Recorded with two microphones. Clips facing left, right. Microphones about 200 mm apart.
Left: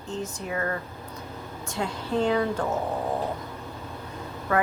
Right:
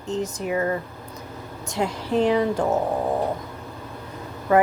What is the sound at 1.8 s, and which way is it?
Speech, 20° right (ahead or behind).